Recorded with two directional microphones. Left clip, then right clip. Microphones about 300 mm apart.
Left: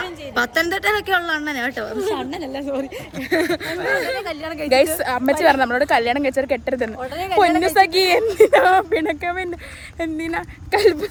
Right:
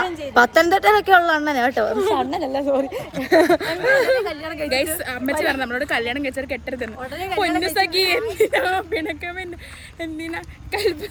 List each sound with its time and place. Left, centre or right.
0.3 s speech: centre
4.2 s a woman's voice: centre